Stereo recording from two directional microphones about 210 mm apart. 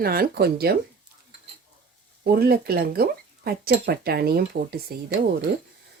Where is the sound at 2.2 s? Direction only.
45° right (ahead or behind).